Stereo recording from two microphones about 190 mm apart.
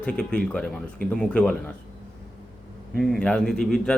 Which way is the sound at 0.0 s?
5° left (ahead or behind).